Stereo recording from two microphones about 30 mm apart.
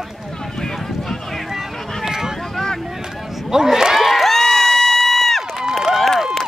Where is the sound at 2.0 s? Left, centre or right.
Centre.